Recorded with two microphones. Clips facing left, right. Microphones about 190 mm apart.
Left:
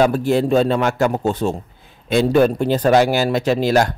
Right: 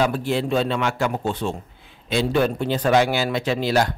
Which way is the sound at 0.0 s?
45° left (ahead or behind).